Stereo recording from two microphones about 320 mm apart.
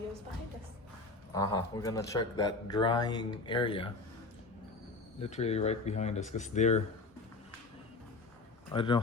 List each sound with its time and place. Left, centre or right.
1.3 s speech: centre
5.2 s speech: centre
8.7 s speech: centre